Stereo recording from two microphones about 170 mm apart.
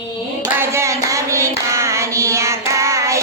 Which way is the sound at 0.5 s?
15° right (ahead or behind).